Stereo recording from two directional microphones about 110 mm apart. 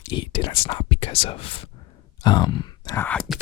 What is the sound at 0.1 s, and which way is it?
Whispering, 50° left (ahead or behind).